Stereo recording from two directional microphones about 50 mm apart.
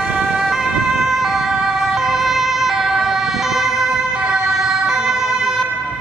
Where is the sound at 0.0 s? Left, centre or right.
Right.